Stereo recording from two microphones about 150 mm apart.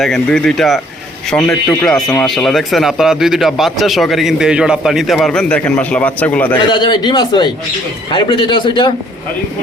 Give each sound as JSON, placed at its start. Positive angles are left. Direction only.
{"t": 0.0, "sound": "speech", "side_deg": 5}
{"t": 1.4, "sound": "speech", "side_deg": 15}
{"t": 2.1, "sound": "speech", "side_deg": 5}
{"t": 6.6, "sound": "a man's voice", "side_deg": 30}